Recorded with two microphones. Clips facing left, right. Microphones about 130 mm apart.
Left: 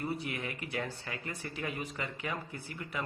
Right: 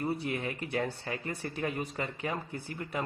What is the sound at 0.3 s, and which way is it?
Speech, 30° right (ahead or behind).